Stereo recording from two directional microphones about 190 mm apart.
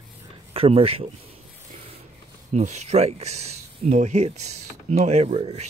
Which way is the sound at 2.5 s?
35° right (ahead or behind).